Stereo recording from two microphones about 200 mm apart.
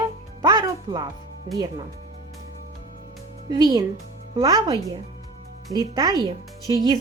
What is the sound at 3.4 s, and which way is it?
Speech, 20° right (ahead or behind).